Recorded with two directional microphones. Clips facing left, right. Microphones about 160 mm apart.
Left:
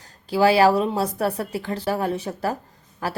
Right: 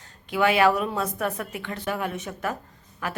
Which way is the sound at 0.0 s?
35° left (ahead or behind).